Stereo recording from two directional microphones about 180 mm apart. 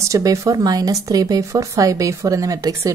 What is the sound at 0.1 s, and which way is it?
Speech, 20° right (ahead or behind).